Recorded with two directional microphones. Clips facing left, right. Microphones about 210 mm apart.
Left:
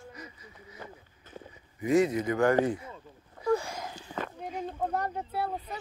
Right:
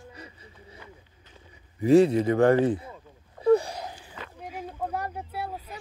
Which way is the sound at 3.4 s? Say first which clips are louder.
Right 7 dB; 35° right (ahead or behind).